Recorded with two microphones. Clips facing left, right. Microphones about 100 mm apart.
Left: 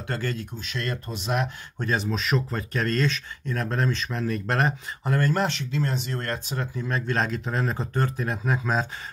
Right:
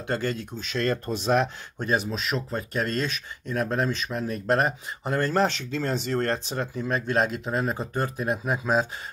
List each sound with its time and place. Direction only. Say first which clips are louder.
0.0 s speech: right 2 dB; 20° right (ahead or behind)
0.7 s speech: right 7 dB; 35° right (ahead or behind)
1.9 s speech: even; 10° right (ahead or behind)
5.0 s speech: right 1 dB; 25° right (ahead or behind)